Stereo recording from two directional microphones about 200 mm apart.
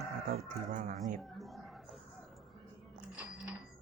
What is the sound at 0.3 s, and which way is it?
Speech, 40° right (ahead or behind).